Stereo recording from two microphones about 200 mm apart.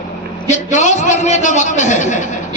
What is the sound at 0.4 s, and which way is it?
A man's voice, 35° left (ahead or behind).